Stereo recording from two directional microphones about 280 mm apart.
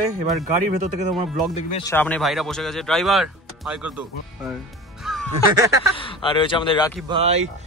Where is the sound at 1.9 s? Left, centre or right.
Centre.